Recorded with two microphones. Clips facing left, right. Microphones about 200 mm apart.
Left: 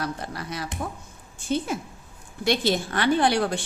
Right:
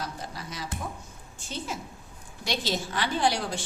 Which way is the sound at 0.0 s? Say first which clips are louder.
Left 6 dB; 60° left (ahead or behind).